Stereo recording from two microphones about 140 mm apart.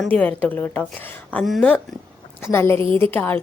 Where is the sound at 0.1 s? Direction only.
10° left (ahead or behind).